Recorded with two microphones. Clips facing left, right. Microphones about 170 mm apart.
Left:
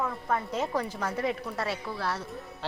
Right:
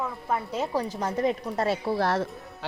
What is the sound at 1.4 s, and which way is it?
Speech, 25° right (ahead or behind).